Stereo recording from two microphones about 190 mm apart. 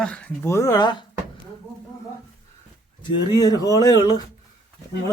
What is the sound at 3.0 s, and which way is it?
Speech, 20° left (ahead or behind).